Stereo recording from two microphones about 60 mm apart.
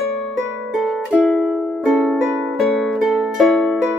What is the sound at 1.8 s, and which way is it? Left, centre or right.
Music, centre.